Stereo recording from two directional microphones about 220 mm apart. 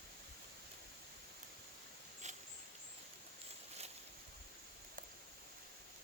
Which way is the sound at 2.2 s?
30° right (ahead or behind).